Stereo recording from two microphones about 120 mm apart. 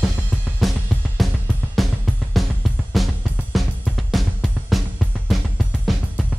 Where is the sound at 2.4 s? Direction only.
Centre (ahead or behind).